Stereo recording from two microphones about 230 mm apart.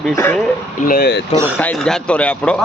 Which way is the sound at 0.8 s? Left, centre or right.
Left.